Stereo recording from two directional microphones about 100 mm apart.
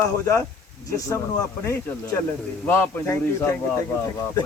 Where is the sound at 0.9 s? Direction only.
30° left (ahead or behind).